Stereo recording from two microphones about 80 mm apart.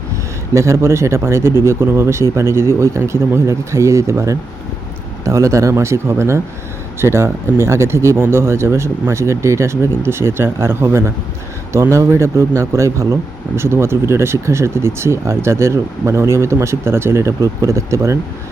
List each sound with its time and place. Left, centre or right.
0.5 s speech: right